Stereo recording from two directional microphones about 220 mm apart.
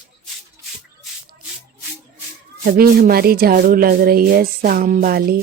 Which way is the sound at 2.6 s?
40° right (ahead or behind).